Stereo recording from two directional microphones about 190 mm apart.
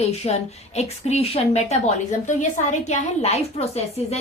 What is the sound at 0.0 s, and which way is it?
A woman's voice, 35° left (ahead or behind).